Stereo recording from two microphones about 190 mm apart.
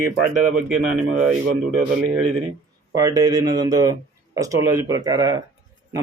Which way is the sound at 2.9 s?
20° right (ahead or behind).